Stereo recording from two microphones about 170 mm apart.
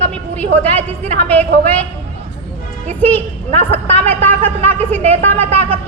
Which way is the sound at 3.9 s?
10° left (ahead or behind).